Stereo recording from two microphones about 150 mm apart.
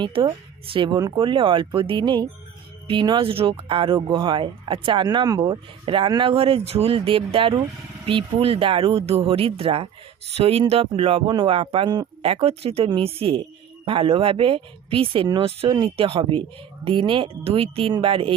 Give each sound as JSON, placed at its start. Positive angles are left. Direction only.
{"t": 0.0, "sound": "speech", "side_deg": -30}
{"t": 5.4, "sound": "speech", "side_deg": -35}